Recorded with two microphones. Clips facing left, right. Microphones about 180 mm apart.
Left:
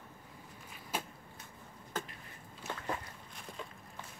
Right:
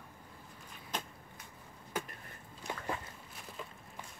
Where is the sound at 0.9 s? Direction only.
10° left (ahead or behind).